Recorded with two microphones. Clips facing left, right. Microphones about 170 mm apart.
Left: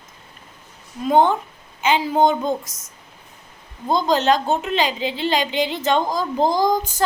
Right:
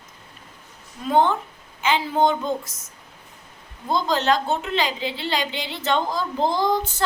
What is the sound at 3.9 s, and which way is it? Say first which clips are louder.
A woman's voice: left 3 dB; 20° left (ahead or behind).